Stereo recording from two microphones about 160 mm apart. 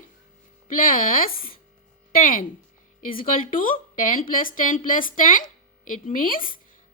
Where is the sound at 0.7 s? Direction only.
60° left (ahead or behind).